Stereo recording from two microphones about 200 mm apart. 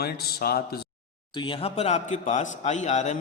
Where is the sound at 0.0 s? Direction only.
50° left (ahead or behind).